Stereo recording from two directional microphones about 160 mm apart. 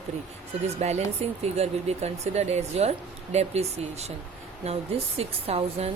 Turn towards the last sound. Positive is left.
turn(degrees=-40)  # may be behind; listen again after turning